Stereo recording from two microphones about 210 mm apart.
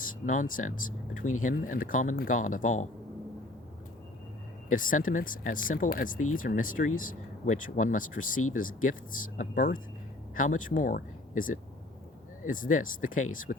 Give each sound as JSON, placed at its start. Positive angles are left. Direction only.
{"t": 0.3, "sound": "speech", "side_deg": 40}
{"t": 4.7, "sound": "speech", "side_deg": 40}